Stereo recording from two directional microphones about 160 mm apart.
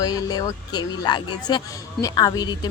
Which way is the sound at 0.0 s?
25° left (ahead or behind).